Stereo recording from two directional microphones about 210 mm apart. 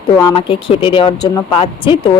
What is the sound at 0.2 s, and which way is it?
Speech, 20° left (ahead or behind).